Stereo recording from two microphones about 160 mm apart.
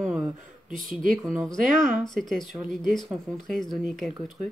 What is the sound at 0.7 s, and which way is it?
Speech, 55° right (ahead or behind).